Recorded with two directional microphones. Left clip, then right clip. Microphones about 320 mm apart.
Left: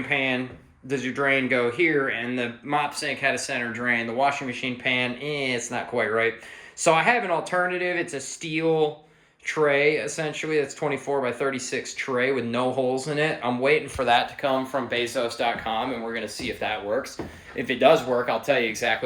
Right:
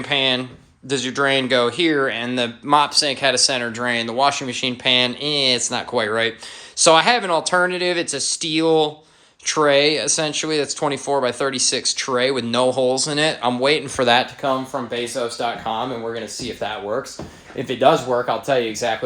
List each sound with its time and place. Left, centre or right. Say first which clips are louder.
0.1 s speech: right 6 dB; centre
13.9 s speech: right 5 dB; right
14.8 s speech: right 2 dB; centre
17.7 s speech: right 3 dB; centre